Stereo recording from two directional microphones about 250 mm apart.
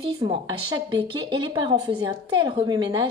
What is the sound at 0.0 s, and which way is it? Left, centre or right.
A woman's voice, right.